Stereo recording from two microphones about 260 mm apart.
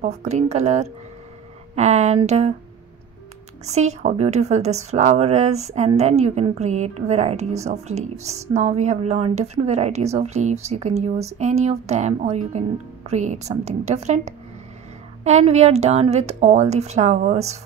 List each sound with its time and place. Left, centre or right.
0.0 s a woman's voice: right
3.6 s a woman's voice: right